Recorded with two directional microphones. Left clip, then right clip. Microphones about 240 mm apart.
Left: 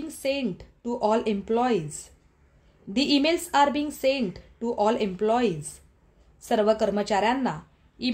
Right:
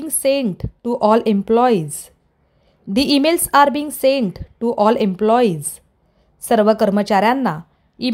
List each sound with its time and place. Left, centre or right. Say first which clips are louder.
0.0 s a woman's voice: right 10 dB; right